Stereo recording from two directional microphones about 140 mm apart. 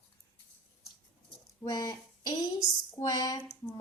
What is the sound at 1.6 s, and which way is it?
A woman's voice, 30° left (ahead or behind).